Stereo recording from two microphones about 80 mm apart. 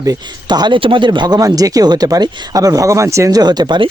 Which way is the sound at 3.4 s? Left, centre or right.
Right.